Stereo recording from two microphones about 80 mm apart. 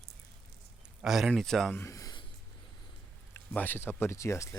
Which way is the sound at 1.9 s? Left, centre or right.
Left.